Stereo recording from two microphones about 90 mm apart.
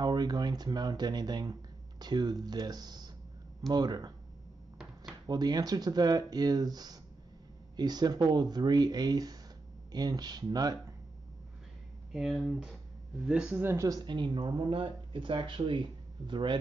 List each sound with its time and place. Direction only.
0.0 s speech: 50° right (ahead or behind)
5.2 s speech: 50° right (ahead or behind)
12.1 s speech: 5° right (ahead or behind)
13.6 s speech: 25° right (ahead or behind)
13.8 s speech: 50° right (ahead or behind)